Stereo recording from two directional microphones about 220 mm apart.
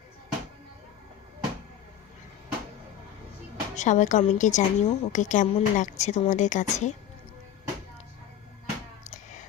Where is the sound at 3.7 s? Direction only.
35° left (ahead or behind).